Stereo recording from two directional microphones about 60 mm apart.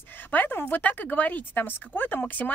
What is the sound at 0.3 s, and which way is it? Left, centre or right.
Speech, left.